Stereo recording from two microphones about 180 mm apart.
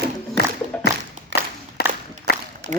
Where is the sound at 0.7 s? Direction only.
5° left (ahead or behind).